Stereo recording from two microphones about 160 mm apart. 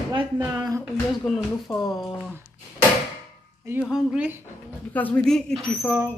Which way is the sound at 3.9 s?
5° right (ahead or behind).